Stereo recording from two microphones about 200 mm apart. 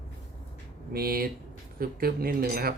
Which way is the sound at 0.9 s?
50° right (ahead or behind).